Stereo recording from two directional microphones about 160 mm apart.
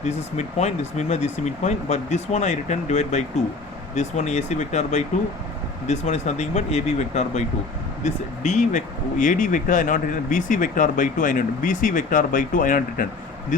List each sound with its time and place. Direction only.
0.0 s speech: 45° left (ahead or behind)